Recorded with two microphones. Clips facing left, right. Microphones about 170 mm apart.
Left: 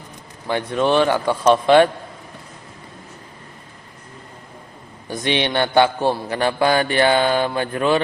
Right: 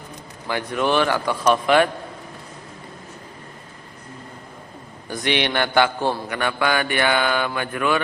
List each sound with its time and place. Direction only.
0.4 s a man's voice: 25° left (ahead or behind)
5.0 s a man's voice: 20° left (ahead or behind)
6.2 s mantra: 30° left (ahead or behind)